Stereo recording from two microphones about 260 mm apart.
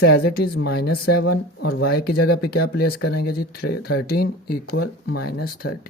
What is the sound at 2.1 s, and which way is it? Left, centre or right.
Speech, left.